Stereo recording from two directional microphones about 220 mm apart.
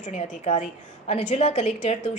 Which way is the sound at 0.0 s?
30° left (ahead or behind).